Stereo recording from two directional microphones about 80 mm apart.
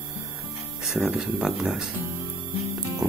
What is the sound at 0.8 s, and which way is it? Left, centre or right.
Speech, centre.